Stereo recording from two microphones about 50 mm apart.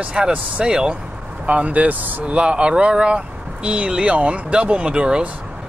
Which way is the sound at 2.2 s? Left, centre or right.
Right.